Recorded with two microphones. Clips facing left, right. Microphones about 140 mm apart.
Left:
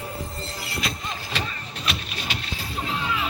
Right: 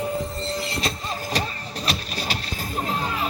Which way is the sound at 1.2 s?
40° right (ahead or behind).